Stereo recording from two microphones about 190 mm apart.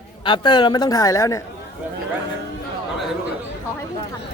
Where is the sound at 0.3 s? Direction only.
25° left (ahead or behind).